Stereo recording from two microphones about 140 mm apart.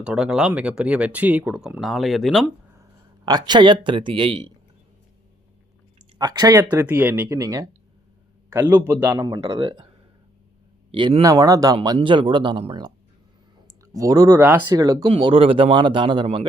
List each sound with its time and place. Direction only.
0.0 s speech: 5° right (ahead or behind)
3.2 s speech: 30° right (ahead or behind)
6.1 s speech: 30° right (ahead or behind)
6.8 s speech: 15° right (ahead or behind)
9.2 s speech: 30° right (ahead or behind)
10.9 s speech: 35° right (ahead or behind)
11.2 s speech: 25° right (ahead or behind)
13.9 s speech: 25° right (ahead or behind)
15.0 s speech: 40° right (ahead or behind)